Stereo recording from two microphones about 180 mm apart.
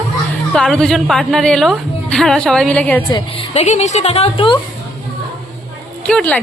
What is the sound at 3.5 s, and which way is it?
A woman's voice, 40° left (ahead or behind).